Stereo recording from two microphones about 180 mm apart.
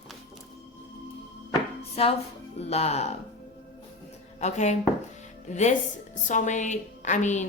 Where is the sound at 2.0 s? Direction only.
35° left (ahead or behind).